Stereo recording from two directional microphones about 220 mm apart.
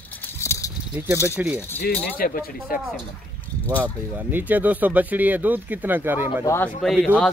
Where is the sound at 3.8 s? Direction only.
5° right (ahead or behind).